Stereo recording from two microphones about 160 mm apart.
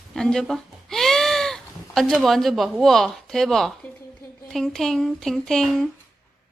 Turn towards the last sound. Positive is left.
turn(degrees=0)  # may be behind; listen again after turning